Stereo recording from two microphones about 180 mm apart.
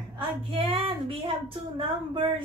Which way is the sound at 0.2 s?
30° right (ahead or behind).